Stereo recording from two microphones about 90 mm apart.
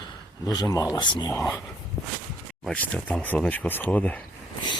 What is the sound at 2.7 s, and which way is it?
Speech, 15° left (ahead or behind).